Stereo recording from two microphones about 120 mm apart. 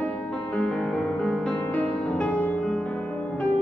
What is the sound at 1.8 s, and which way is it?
Music, 10° left (ahead or behind).